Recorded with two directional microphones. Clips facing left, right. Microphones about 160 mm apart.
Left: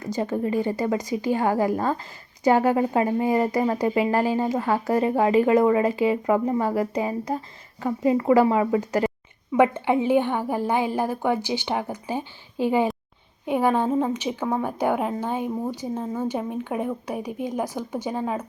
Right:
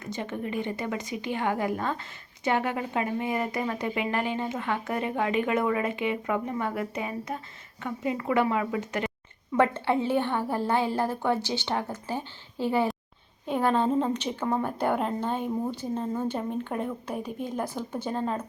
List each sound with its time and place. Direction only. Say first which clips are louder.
0.0 s speech: left 8 dB; 35° left (ahead or behind)
9.5 s a woman's voice: left 4 dB; 15° left (ahead or behind)